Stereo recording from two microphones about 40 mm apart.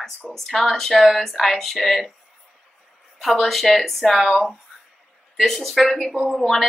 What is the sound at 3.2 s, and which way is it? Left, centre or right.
Speech, centre.